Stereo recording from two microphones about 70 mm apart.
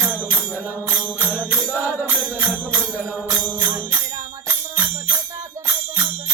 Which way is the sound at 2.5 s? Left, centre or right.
Centre.